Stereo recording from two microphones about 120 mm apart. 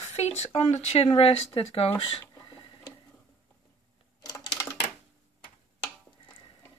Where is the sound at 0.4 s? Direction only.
60° left (ahead or behind).